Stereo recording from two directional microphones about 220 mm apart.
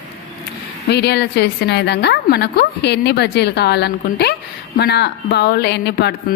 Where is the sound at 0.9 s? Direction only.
50° left (ahead or behind).